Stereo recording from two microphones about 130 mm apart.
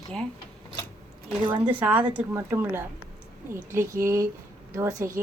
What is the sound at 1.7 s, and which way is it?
A woman's voice, 10° right (ahead or behind).